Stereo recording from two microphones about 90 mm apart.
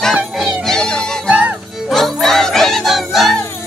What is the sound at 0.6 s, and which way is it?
Music, 5° left (ahead or behind).